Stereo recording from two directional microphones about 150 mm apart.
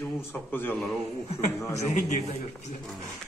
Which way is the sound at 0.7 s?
Centre (ahead or behind).